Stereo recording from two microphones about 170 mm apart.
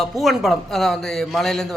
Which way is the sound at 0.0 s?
Centre (ahead or behind).